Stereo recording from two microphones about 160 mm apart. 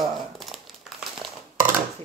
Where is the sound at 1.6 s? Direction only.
55° right (ahead or behind).